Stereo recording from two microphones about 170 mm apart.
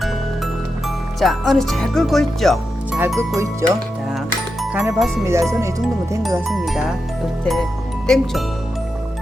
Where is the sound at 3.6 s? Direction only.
20° right (ahead or behind).